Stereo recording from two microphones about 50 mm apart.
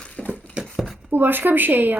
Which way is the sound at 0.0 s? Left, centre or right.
Left.